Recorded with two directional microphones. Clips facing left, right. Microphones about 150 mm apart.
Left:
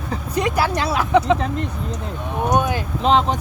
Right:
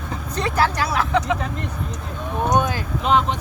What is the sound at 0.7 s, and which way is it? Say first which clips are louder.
Speech: left 3 dB; 20° left (ahead or behind).